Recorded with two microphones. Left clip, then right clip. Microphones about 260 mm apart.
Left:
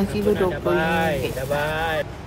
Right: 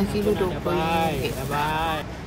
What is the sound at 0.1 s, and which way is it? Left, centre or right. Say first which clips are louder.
Speech: left 4 dB; centre.